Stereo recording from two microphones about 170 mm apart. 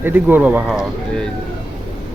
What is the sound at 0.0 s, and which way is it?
Speech, 10° right (ahead or behind).